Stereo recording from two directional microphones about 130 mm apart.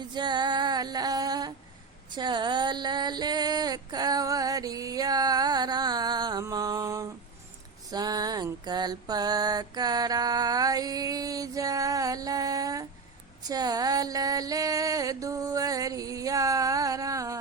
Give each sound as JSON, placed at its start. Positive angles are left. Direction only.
{"t": 0.1, "sound": "female singing", "side_deg": -35}
{"t": 2.0, "sound": "a sound", "side_deg": -35}
{"t": 7.9, "sound": "music", "side_deg": -30}